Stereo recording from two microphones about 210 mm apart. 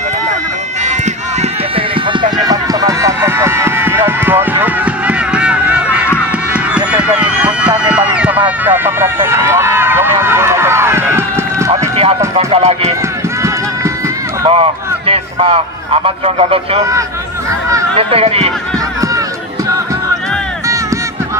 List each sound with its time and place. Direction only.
2.3 s run: 15° right (ahead or behind)
6.5 s a sound: 5° right (ahead or behind)
7.9 s run: 5° right (ahead or behind)
12.4 s run: 30° right (ahead or behind)
14.4 s a sound: 25° right (ahead or behind)
17.9 s speech: 30° right (ahead or behind)